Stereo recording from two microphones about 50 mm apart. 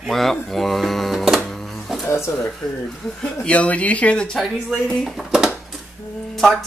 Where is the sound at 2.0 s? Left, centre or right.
Left.